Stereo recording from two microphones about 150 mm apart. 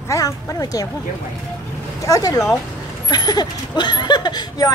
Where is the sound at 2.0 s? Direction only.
25° left (ahead or behind).